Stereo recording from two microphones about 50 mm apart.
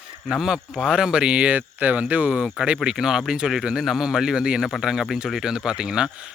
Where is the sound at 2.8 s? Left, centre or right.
Centre.